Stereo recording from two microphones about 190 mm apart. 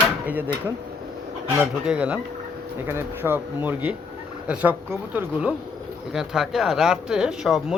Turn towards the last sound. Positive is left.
turn(degrees=-5)  # may be behind; listen again after turning